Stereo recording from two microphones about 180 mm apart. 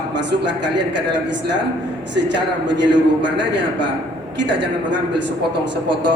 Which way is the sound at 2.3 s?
75° right (ahead or behind).